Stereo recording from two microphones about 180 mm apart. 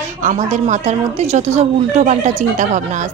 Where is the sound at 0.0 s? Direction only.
40° right (ahead or behind).